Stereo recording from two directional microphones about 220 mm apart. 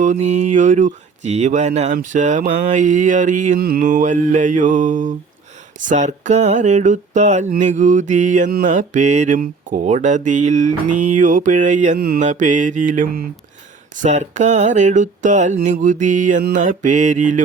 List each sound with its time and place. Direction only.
0.0 s mantra: 30° right (ahead or behind)